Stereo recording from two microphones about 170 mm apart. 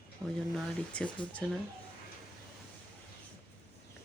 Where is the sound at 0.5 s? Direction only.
5° left (ahead or behind).